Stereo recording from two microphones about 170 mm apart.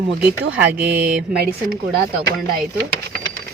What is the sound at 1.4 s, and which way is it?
Speech, 60° right (ahead or behind).